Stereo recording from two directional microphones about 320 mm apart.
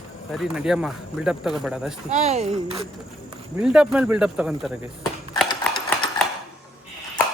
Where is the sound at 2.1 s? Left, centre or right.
Right.